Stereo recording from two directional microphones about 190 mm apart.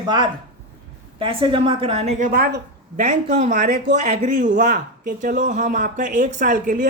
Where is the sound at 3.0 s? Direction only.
40° right (ahead or behind).